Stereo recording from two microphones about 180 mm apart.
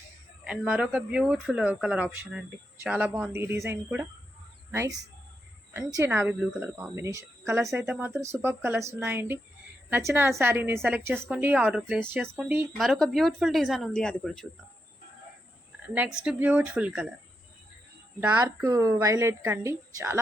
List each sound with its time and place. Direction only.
0.4 s a woman's voice: 5° right (ahead or behind)
16.2 s speech: 10° right (ahead or behind)
18.2 s speech: 10° right (ahead or behind)